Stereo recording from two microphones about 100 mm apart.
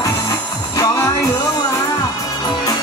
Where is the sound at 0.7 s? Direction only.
30° left (ahead or behind).